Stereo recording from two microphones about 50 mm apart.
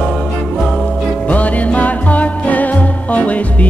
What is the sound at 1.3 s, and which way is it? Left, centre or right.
Music, left.